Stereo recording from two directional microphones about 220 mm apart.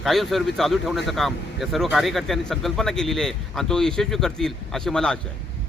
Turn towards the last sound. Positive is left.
turn(degrees=5)  # may be behind; listen again after turning